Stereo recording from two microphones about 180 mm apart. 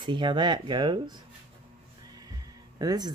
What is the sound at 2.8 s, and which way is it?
Speech, 20° right (ahead or behind).